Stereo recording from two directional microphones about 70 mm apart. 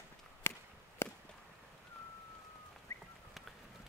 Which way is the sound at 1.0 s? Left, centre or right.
Left.